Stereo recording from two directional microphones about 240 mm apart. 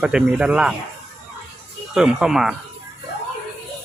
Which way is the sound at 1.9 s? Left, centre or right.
Centre.